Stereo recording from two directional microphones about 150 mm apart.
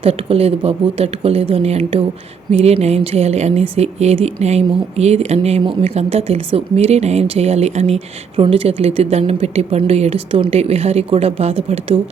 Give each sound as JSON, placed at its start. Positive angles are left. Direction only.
{"t": 0.0, "sound": "speech", "side_deg": -40}